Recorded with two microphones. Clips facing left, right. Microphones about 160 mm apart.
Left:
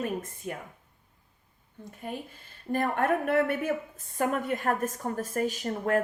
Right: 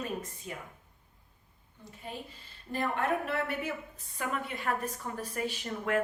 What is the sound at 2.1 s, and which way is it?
A woman's voice, 50° left (ahead or behind).